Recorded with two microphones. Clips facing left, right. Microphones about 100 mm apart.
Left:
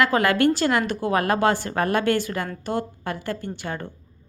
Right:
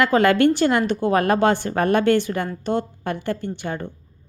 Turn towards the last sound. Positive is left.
turn(degrees=-25)  # may be behind; listen again after turning